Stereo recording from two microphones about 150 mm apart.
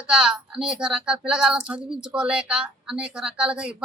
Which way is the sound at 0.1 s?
5° right (ahead or behind).